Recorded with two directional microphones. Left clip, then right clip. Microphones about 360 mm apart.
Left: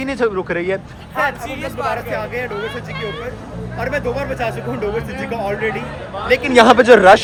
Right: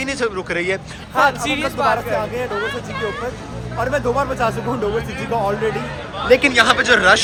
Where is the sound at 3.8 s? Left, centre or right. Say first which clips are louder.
Right 2 dB; right.